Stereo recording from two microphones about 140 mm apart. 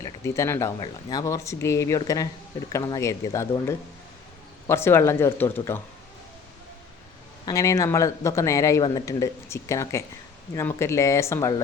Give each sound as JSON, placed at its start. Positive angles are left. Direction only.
{"t": 0.0, "sound": "speech", "side_deg": 20}
{"t": 7.4, "sound": "speech", "side_deg": 25}